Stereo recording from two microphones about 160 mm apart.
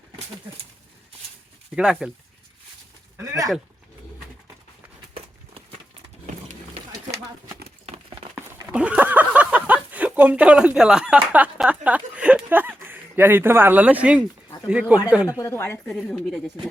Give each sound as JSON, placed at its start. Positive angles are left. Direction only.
{"t": 1.7, "sound": "speech", "side_deg": -5}
{"t": 3.2, "sound": "a sound", "side_deg": -20}
{"t": 8.7, "sound": "speech", "side_deg": -5}
{"t": 15.3, "sound": "speech", "side_deg": 20}